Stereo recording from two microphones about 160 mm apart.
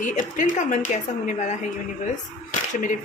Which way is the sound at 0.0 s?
50° left (ahead or behind).